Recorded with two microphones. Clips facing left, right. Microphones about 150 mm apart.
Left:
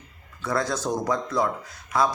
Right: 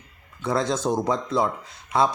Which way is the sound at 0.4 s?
25° right (ahead or behind).